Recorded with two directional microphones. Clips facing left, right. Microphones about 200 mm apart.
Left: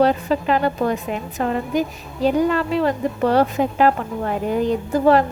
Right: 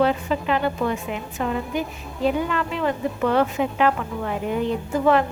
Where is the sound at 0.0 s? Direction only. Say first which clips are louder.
Left 3 dB; 40° left (ahead or behind).